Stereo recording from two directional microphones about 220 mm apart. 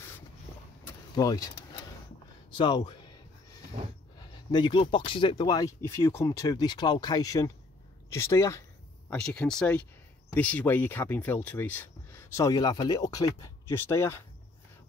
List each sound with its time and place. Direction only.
0.8 s vehicle: 15° left (ahead or behind)
2.5 s speech: 20° left (ahead or behind)
4.2 s speech: 20° left (ahead or behind)